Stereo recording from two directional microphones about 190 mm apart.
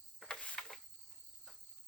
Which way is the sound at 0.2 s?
5° left (ahead or behind).